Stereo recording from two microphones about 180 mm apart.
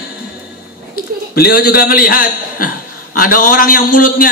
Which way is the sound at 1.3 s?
60° left (ahead or behind).